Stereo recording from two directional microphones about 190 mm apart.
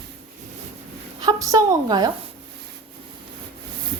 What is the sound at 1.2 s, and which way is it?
Speech, 20° right (ahead or behind).